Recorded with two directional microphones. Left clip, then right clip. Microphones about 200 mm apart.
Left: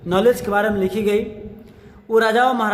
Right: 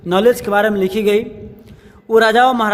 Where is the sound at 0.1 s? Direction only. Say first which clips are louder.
Right 3 dB; 40° right (ahead or behind).